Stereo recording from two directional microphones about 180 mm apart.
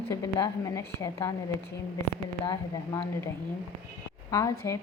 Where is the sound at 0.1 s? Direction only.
20° left (ahead or behind).